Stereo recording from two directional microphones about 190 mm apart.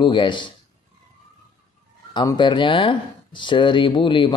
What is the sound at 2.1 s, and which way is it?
Speech, 25° left (ahead or behind).